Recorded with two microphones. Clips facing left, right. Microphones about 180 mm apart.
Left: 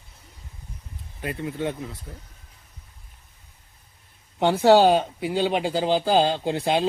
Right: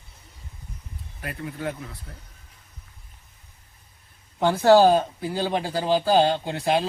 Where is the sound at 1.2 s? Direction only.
25° left (ahead or behind).